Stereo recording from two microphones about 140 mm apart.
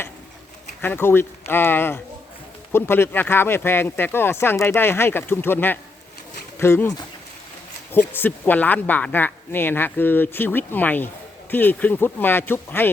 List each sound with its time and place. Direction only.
0.8 s speech: 15° left (ahead or behind)
7.9 s speech: 15° left (ahead or behind)